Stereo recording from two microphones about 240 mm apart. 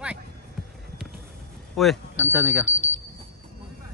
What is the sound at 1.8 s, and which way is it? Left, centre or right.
Speech, centre.